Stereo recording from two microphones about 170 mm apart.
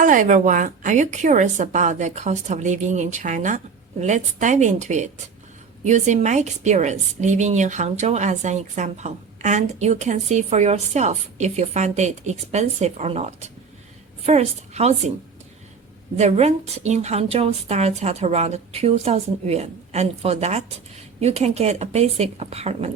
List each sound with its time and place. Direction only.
0.0 s a woman's voice: 50° right (ahead or behind)
16.1 s a woman's voice: 40° right (ahead or behind)